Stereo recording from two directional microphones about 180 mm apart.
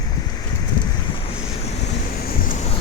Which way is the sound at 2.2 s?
55° left (ahead or behind).